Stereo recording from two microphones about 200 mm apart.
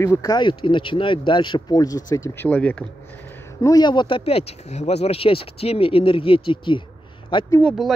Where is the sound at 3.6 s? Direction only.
20° left (ahead or behind).